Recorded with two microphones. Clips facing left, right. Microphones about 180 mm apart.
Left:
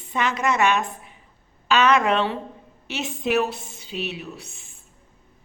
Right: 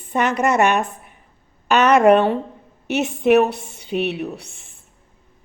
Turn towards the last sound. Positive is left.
turn(degrees=-70)  # may be behind; listen again after turning